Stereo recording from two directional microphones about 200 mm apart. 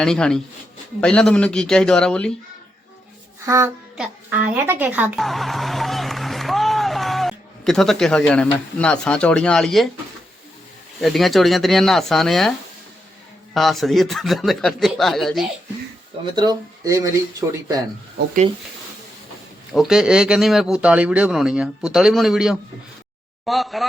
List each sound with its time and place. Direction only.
0.0 s speech: 5° left (ahead or behind)
3.4 s a woman's voice: 15° right (ahead or behind); by 9.9 s centre (ahead or behind)
11.0 s speech: centre (ahead or behind)
16.3 s speech: 20° right (ahead or behind)
19.7 s speech: centre (ahead or behind)